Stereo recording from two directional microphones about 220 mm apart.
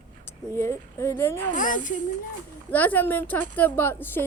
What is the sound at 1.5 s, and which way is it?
Speech, 35° left (ahead or behind).